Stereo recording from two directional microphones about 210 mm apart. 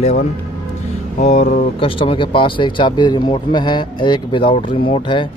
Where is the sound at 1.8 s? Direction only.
25° left (ahead or behind).